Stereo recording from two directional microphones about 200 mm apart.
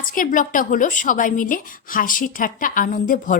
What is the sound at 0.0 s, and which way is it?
A woman's voice, 40° left (ahead or behind).